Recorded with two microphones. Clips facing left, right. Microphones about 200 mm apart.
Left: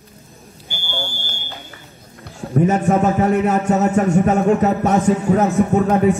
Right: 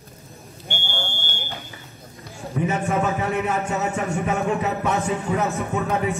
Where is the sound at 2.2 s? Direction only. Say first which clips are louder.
Left 8 dB; 50° left (ahead or behind).